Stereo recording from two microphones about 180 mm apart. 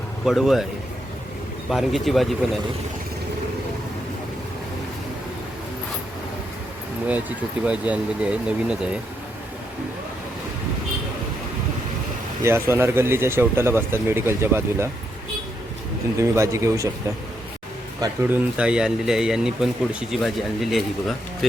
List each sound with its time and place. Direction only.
0.3 s speech: centre (ahead or behind)
1.7 s speech: centre (ahead or behind)
7.6 s speech: 5° right (ahead or behind)
12.4 s speech: 15° right (ahead or behind)
16.1 s speech: 15° right (ahead or behind)
18.0 s speech: 10° right (ahead or behind)